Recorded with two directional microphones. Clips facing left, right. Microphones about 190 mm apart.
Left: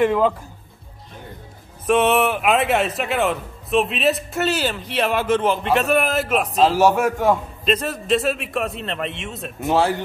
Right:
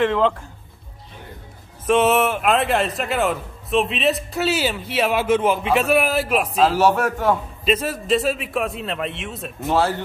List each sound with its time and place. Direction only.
0.0 s a man's voice: 10° left (ahead or behind)
1.9 s a man's voice: centre (ahead or behind)
6.8 s a man's voice: 10° left (ahead or behind)
7.6 s a man's voice: 5° right (ahead or behind)
9.6 s a man's voice: 15° left (ahead or behind)